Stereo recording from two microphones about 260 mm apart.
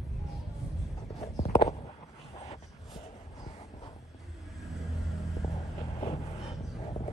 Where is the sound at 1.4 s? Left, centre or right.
Left.